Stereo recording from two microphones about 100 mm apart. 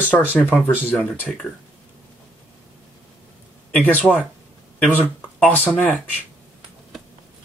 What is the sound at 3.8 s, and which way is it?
Speech, 15° left (ahead or behind).